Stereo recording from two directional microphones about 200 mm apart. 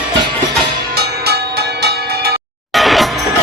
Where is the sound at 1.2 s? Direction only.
55° right (ahead or behind).